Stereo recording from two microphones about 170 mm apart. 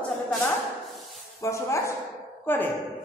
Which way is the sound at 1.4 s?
15° left (ahead or behind).